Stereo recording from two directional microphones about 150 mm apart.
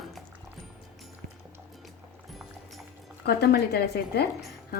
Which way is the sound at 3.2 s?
90° left.